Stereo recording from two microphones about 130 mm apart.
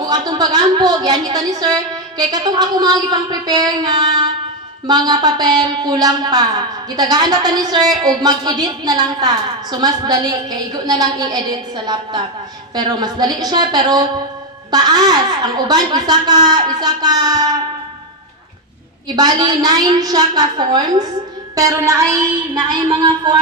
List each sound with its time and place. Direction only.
0.0 s speech: 30° right (ahead or behind)
19.0 s a woman's voice: 30° right (ahead or behind)